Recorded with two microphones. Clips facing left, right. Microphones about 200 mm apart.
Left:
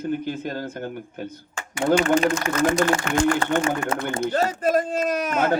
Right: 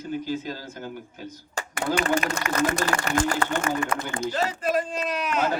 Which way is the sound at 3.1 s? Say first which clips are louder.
Left 2 dB; 40° right (ahead or behind).